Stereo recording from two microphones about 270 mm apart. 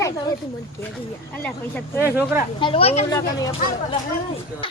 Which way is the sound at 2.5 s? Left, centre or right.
Centre.